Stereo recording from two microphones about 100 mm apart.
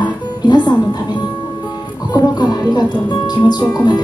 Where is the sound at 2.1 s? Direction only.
40° left (ahead or behind).